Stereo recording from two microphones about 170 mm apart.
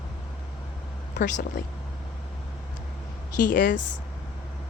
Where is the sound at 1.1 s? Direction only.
50° left (ahead or behind).